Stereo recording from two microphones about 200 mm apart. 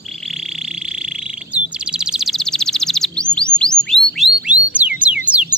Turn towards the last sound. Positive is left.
turn(degrees=-5)  # may be behind; listen again after turning